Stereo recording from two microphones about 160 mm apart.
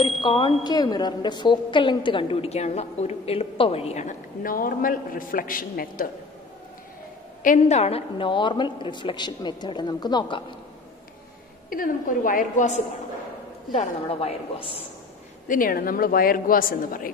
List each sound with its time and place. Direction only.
0.2 s a woman's voice: 30° left (ahead or behind); by 6.0 s 60° left (ahead or behind)
7.4 s a woman's voice: 50° left (ahead or behind); by 10.4 s 30° left (ahead or behind)
11.7 s a man's voice: 60° left (ahead or behind)
13.7 s a woman's voice: 40° left (ahead or behind)
15.4 s a man's voice: 60° left (ahead or behind)